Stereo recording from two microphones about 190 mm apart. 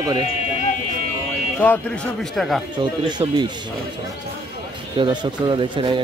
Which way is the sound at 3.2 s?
30° right (ahead or behind).